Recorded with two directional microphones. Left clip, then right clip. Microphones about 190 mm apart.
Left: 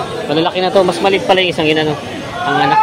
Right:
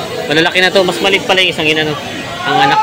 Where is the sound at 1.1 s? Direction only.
15° left (ahead or behind).